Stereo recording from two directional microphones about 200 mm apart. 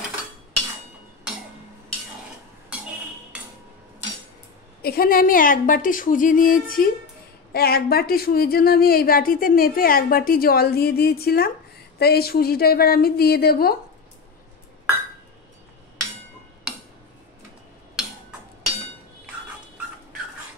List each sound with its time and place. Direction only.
4.8 s a woman's voice: 45° left (ahead or behind)